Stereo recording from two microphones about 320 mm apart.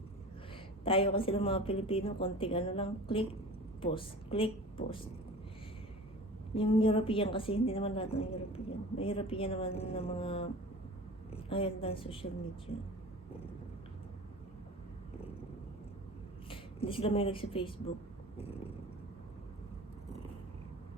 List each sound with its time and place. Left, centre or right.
0.9 s a woman's voice: centre
6.5 s a woman's voice: centre
16.5 s speech: centre
18.3 s vehicle: centre